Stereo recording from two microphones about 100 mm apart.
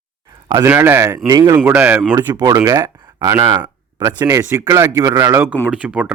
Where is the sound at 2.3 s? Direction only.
45° right (ahead or behind); by 3.5 s 30° right (ahead or behind).